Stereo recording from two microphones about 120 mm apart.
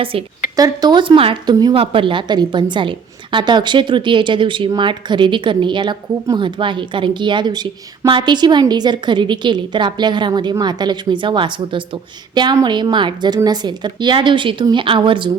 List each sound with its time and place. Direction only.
0.0 s speech: 50° right (ahead or behind)
0.5 s speech: 35° right (ahead or behind)